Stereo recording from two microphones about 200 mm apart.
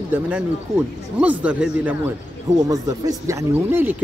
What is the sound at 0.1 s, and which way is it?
Speech, 10° right (ahead or behind).